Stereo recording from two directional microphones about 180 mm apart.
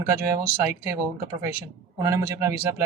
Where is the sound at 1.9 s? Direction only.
15° right (ahead or behind).